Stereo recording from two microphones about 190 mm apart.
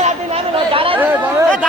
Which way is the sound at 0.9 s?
10° right (ahead or behind).